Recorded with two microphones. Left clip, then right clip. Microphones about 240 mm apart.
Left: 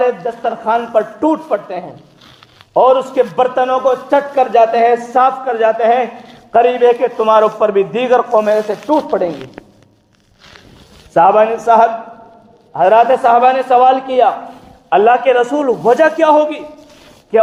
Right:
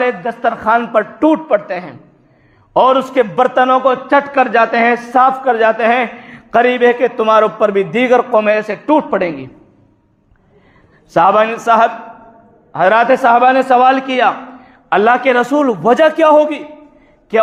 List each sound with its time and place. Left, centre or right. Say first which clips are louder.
0.0 s a man's voice: even; right
11.1 s a man's voice: left 1 dB; right